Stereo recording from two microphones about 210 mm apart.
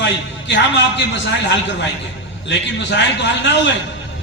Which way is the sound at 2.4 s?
55° left (ahead or behind).